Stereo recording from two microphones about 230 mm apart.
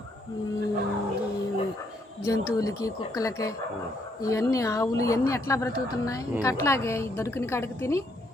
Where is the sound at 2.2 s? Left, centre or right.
Centre.